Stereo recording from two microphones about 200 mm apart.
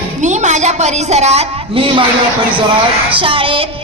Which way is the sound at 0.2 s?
35° right (ahead or behind).